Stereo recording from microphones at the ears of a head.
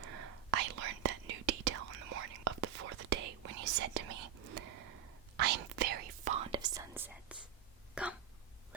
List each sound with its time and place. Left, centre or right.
0.0 s whispering: right